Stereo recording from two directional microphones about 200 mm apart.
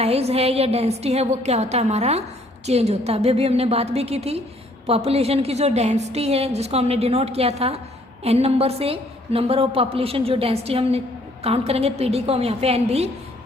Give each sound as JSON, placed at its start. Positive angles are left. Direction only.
{"t": 0.0, "sound": "a woman's voice", "side_deg": -30}